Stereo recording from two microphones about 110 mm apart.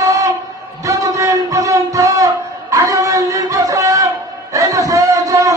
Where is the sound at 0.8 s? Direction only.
30° right (ahead or behind).